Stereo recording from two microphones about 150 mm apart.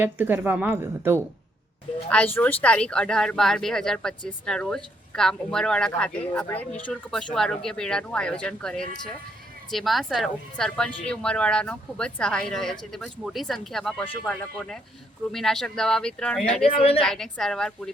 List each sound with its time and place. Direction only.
0.0 s a woman's voice: 15° right (ahead or behind)
2.0 s speech: 10° left (ahead or behind)
16.6 s a woman's voice: 40° left (ahead or behind)
17.0 s speech: 5° left (ahead or behind)